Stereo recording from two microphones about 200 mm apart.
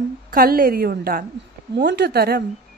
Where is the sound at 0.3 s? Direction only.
45° right (ahead or behind).